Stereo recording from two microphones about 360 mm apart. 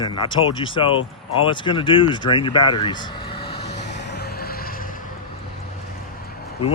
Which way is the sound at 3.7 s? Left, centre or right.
Centre.